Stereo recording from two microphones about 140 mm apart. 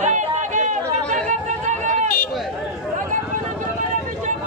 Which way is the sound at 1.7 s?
60° right (ahead or behind).